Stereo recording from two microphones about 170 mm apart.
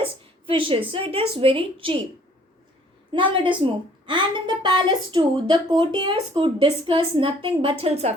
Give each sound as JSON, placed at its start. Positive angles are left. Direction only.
{"t": 0.0, "sound": "a woman's voice", "side_deg": -30}
{"t": 3.1, "sound": "a woman's voice", "side_deg": -30}